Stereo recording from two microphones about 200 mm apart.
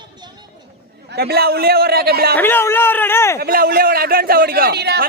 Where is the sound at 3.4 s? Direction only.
50° right (ahead or behind).